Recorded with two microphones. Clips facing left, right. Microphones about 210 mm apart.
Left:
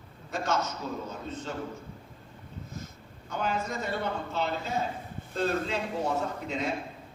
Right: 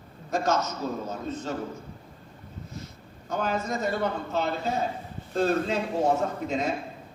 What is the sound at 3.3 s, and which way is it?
Speech, 45° right (ahead or behind).